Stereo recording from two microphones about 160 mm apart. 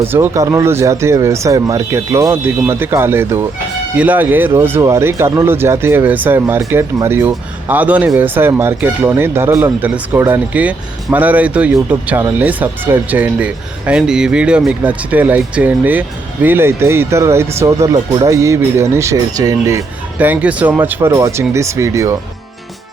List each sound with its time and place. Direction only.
0.1 s speech: 15° right (ahead or behind)